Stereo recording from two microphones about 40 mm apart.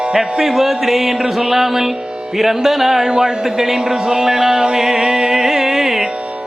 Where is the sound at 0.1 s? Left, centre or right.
Centre.